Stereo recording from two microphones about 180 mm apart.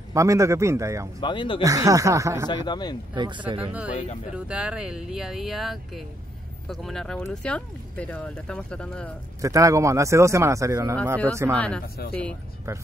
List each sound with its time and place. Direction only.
0.1 s speech: 15° right (ahead or behind)
1.2 s speech: 25° left (ahead or behind)
1.6 s speech: 20° right (ahead or behind)
2.4 s speech: 25° left (ahead or behind)
3.2 s speech: 25° right (ahead or behind)
3.9 s speech: 40° left (ahead or behind)
4.5 s speech: 5° right (ahead or behind)
9.4 s speech: 15° right (ahead or behind)
11.5 s speech: 5° left (ahead or behind)
12.7 s speech: 15° right (ahead or behind)